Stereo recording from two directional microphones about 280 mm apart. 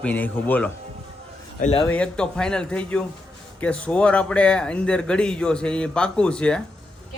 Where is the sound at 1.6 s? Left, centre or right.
Left.